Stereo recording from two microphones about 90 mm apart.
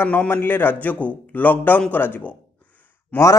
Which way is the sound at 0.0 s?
20° left (ahead or behind).